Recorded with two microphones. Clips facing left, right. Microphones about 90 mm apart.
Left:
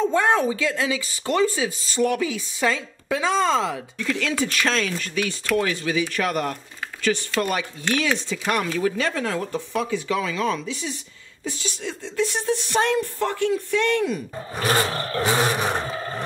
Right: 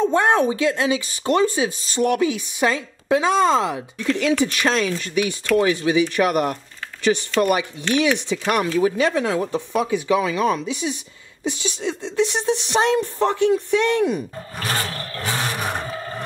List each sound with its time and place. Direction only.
0.0 s speech: 20° right (ahead or behind)
14.7 s roar: 25° left (ahead or behind)
15.6 s a sound: centre (ahead or behind)